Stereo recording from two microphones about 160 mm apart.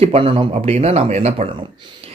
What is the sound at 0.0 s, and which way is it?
Speech, 35° right (ahead or behind).